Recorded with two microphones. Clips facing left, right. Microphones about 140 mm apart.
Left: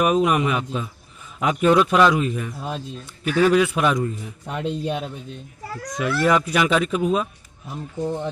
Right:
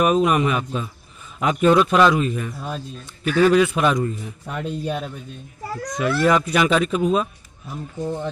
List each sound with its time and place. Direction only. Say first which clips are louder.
0.0 s speech: right 1 dB; 10° left (ahead or behind)
4.8 s a man's voice: even; 20° left (ahead or behind)
5.6 s a child's voice: right 5 dB; 35° right (ahead or behind)
5.9 s speech: right 1 dB; 5° left (ahead or behind)
7.6 s speech: left 1 dB; 15° left (ahead or behind)